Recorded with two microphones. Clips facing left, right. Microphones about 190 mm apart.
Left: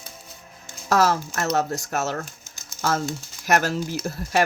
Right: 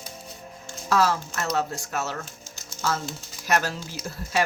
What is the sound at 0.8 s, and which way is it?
Speech, 45° left (ahead or behind).